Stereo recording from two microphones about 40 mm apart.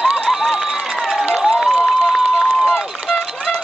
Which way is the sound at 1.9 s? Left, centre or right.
Centre.